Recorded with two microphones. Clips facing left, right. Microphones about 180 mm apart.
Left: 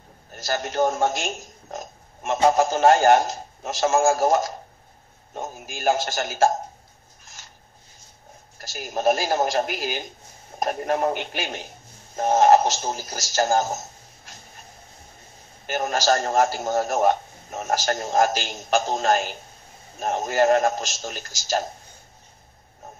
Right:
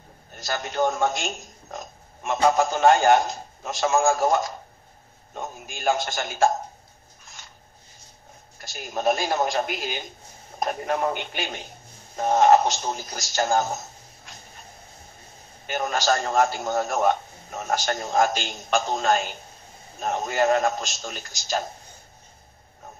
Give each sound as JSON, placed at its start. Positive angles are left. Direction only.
{"t": 0.3, "sound": "a man's voice", "side_deg": 40}
{"t": 8.5, "sound": "a man's voice", "side_deg": 45}
{"t": 15.7, "sound": "a man's voice", "side_deg": 45}